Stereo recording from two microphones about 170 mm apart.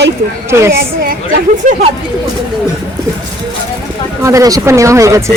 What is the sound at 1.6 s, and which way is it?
Speech, 45° right (ahead or behind).